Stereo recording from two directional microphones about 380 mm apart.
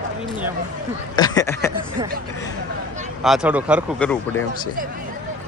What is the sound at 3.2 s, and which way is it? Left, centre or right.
Speech, centre.